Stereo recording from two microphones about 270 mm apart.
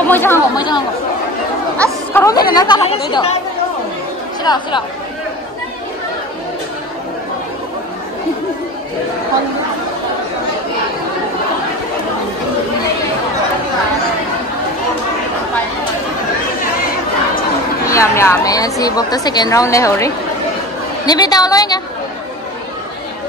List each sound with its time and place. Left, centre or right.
0.1 s a woman's voice: centre
2.1 s a woman's voice: centre
4.4 s speech: centre
17.8 s a woman's voice: centre